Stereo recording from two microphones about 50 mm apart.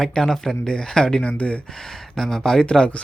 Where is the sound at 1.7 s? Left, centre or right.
Centre.